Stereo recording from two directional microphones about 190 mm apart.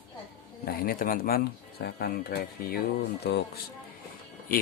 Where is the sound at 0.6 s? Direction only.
50° left (ahead or behind).